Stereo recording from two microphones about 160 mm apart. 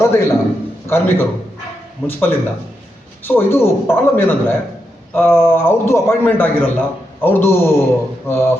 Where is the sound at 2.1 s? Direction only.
15° left (ahead or behind).